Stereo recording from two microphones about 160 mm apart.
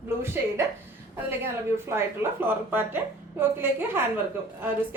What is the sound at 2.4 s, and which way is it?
A woman's voice, 15° right (ahead or behind).